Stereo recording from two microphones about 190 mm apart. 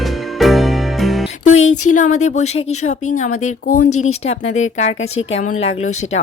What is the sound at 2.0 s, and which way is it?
Speech, 40° left (ahead or behind).